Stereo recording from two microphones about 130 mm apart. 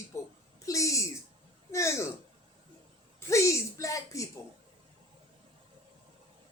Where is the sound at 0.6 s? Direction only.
25° left (ahead or behind).